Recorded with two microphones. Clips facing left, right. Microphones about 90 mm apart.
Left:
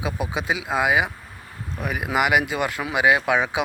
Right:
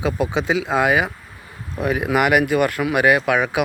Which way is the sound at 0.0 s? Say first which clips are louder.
Right 6 dB; 10° left (ahead or behind).